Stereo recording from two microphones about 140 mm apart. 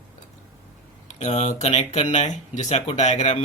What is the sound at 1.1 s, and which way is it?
Speech, 50° left (ahead or behind).